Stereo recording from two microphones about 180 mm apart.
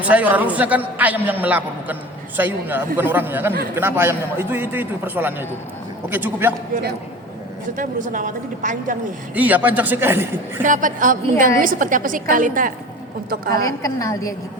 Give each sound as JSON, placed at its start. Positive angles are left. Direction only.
{"t": 0.0, "sound": "a man's voice", "side_deg": -10}
{"t": 7.8, "sound": "a woman's voice", "side_deg": -45}
{"t": 9.3, "sound": "a man's voice", "side_deg": -10}
{"t": 10.6, "sound": "a woman's voice", "side_deg": -45}
{"t": 13.7, "sound": "a woman's voice", "side_deg": 20}